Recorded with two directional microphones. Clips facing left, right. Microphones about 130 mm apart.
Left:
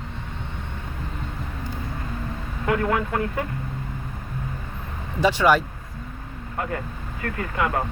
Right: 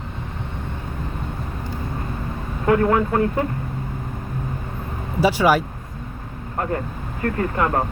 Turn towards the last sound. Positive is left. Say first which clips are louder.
# right 5 dB
turn(degrees=-40)  # may be behind; listen again after turning